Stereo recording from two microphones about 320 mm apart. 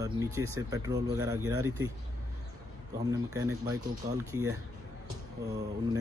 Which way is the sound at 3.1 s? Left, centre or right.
Centre.